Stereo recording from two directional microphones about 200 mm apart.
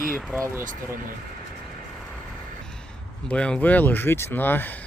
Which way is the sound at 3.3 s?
5° left (ahead or behind).